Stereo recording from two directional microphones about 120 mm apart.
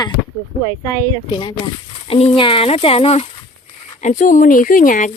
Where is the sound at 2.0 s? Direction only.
55° left (ahead or behind).